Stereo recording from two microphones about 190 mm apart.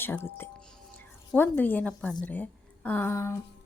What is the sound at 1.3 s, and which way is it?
A woman's voice, 10° left (ahead or behind).